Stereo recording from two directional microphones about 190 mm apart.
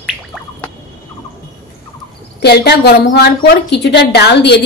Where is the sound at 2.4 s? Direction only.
60° left (ahead or behind).